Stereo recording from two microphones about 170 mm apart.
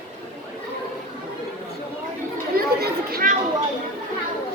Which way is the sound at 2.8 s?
60° right (ahead or behind).